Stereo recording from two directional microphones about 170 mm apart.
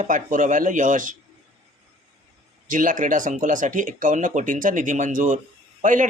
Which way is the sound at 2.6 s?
50° right (ahead or behind).